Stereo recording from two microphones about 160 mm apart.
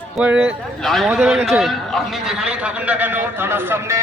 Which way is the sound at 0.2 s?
10° right (ahead or behind).